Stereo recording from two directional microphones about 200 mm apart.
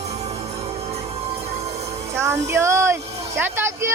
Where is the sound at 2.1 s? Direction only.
15° right (ahead or behind).